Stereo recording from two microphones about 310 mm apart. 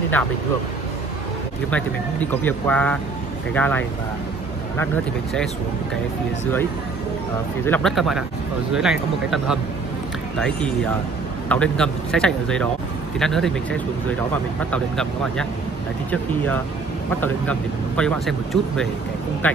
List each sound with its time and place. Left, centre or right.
2.4 s speech: centre
7.6 s speech: centre
11.4 s speech: centre
17.2 s speech: centre